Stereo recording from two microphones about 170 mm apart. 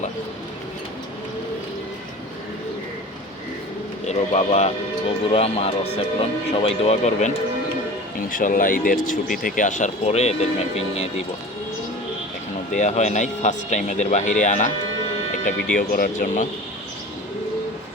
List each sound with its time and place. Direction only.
4.0 s speech: 40° left (ahead or behind)
12.7 s speech: 45° left (ahead or behind)
15.7 s speech: 55° left (ahead or behind)